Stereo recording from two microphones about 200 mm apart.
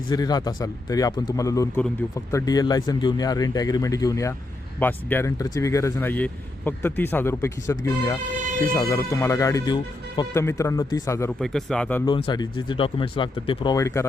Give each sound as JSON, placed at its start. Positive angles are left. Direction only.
{"t": 0.1, "sound": "speech", "side_deg": 20}
{"t": 11.3, "sound": "speech", "side_deg": 0}
{"t": 12.0, "sound": "speech", "side_deg": 25}